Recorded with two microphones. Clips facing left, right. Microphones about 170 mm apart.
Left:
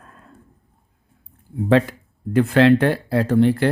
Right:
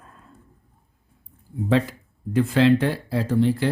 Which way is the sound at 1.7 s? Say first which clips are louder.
Left 5 dB; 60° left (ahead or behind).